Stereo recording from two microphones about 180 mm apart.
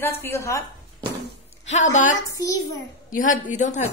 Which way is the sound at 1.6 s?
40° left (ahead or behind).